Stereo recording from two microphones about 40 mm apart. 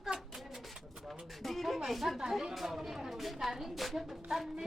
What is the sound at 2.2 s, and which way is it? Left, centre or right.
A woman's voice, centre.